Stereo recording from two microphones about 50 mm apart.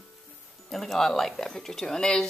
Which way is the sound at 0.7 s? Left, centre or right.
Centre.